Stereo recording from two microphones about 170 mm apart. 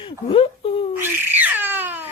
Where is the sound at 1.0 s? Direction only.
10° right (ahead or behind).